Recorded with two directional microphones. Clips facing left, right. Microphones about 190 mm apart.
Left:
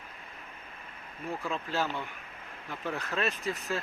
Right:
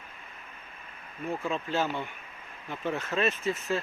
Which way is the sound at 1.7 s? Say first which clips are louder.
Right 2 dB; 20° right (ahead or behind).